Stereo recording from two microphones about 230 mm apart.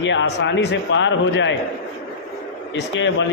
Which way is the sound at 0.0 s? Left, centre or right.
Left.